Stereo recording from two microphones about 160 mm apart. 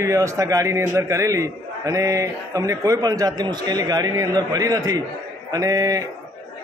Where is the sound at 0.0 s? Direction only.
20° right (ahead or behind).